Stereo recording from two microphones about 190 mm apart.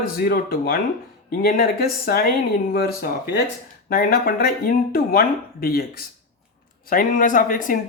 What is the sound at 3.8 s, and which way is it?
Speech, 50° left (ahead or behind).